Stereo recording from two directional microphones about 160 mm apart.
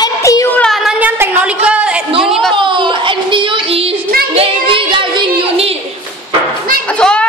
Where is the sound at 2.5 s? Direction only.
30° right (ahead or behind).